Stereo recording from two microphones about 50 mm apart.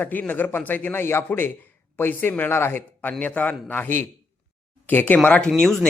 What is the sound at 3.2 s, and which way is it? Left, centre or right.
Speech, left.